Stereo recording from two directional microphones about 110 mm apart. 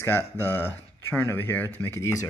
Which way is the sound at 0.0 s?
20° left (ahead or behind).